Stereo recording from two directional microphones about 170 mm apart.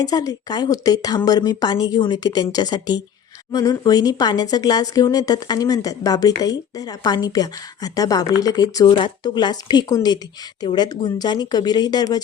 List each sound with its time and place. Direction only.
0.0 s speech: 20° left (ahead or behind)